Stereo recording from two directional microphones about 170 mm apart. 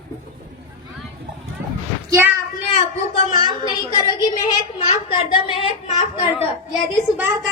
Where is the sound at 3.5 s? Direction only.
25° left (ahead or behind).